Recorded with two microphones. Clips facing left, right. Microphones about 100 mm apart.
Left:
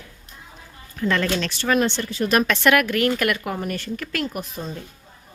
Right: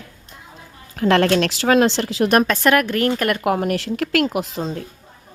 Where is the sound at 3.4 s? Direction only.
75° right (ahead or behind).